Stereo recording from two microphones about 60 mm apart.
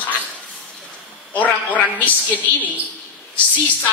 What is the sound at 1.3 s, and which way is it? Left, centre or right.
Speech, left.